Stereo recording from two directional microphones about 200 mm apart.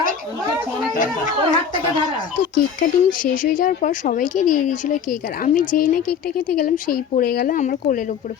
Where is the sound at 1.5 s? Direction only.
20° left (ahead or behind).